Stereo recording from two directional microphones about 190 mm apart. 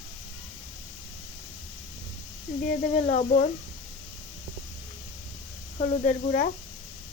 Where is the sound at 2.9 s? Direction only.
35° left (ahead or behind).